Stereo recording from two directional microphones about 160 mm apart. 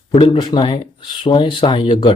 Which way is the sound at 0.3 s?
25° left (ahead or behind).